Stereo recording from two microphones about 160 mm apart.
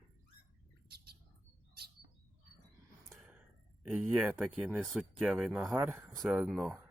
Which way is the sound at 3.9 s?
15° right (ahead or behind).